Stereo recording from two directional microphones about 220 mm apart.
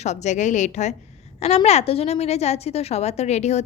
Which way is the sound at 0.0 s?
30° left (ahead or behind).